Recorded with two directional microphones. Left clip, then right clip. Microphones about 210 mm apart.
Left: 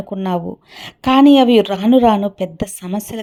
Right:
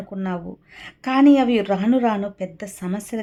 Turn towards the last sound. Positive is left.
turn(degrees=20)  # may be behind; listen again after turning